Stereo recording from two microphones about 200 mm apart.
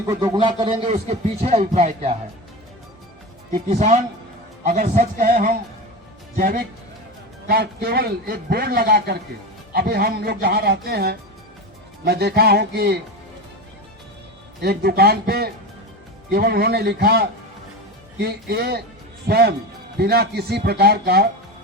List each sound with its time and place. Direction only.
0.1 s a man's voice: 20° right (ahead or behind)
3.5 s a man's voice: 35° right (ahead or behind); by 13.0 s 50° right (ahead or behind)
14.6 s a man's voice: 50° right (ahead or behind)